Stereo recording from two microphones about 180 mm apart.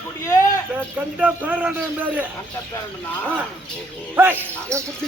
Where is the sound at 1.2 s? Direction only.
10° right (ahead or behind).